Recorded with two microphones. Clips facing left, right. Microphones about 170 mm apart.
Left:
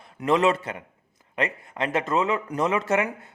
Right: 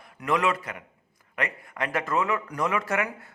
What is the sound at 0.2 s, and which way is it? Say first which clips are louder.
Speech: left 4 dB; 25° left (ahead or behind).